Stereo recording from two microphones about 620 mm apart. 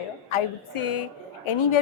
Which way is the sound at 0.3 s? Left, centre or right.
Left.